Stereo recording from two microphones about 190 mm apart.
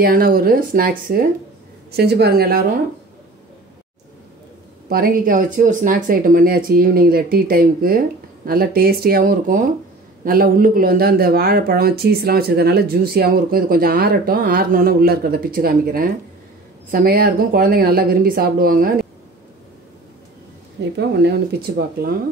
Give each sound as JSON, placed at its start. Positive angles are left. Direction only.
{"t": 0.0, "sound": "speech", "side_deg": -50}
{"t": 4.8, "sound": "speech", "side_deg": -50}
{"t": 21.0, "sound": "speech", "side_deg": -60}